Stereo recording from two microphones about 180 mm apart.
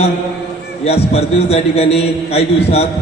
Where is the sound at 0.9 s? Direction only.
35° left (ahead or behind).